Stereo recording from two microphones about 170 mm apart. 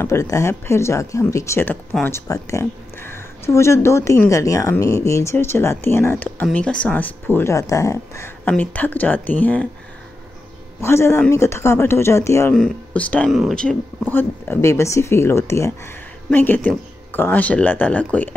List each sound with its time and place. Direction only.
0.0 s speech: 15° left (ahead or behind)
10.8 s speech: 15° left (ahead or behind)
14.1 s speech: 15° left (ahead or behind)